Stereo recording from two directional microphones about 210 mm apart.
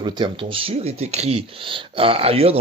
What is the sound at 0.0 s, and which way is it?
Speech, 20° right (ahead or behind).